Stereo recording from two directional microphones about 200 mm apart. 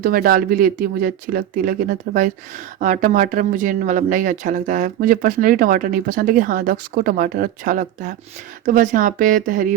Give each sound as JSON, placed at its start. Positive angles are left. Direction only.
{"t": 0.0, "sound": "speech", "side_deg": -45}